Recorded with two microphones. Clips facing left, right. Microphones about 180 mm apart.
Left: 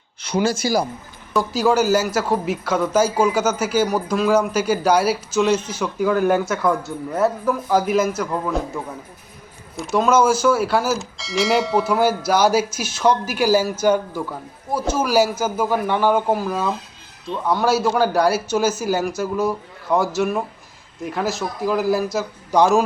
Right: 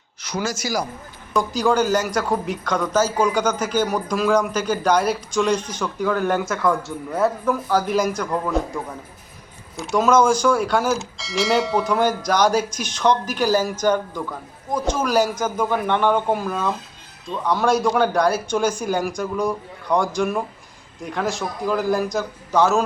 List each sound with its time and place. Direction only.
0.2 s speech: 30° left (ahead or behind)
1.3 s a man's voice: 5° left (ahead or behind)
22.5 s speech: 15° left (ahead or behind)